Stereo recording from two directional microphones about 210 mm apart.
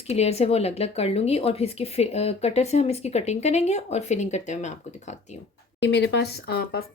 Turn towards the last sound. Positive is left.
turn(degrees=50)  # may be behind; listen again after turning